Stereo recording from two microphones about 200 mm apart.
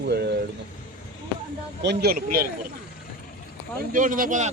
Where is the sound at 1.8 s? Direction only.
55° right (ahead or behind).